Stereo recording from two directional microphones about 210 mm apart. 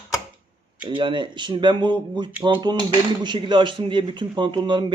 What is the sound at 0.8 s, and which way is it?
Speech, 25° right (ahead or behind).